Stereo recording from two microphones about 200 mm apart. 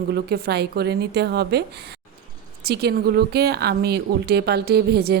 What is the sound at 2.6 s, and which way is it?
Speech, 55° right (ahead or behind).